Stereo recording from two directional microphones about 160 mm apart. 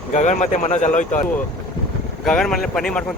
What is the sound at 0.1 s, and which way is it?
Speech, 50° left (ahead or behind).